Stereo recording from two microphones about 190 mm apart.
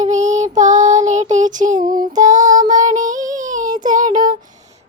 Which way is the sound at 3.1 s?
40° right (ahead or behind).